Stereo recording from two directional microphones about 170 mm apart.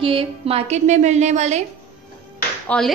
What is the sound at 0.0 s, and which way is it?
A woman's voice, 35° right (ahead or behind).